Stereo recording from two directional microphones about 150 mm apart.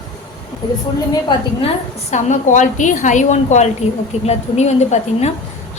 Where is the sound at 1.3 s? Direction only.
45° left (ahead or behind).